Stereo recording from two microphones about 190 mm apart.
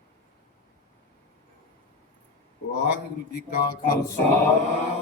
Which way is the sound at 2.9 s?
60° left (ahead or behind).